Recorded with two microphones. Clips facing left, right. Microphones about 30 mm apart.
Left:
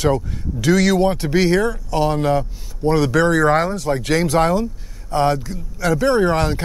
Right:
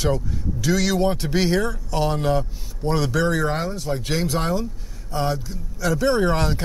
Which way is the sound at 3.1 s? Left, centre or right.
Left.